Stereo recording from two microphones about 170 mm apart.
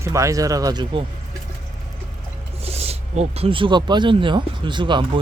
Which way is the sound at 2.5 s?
35° right (ahead or behind).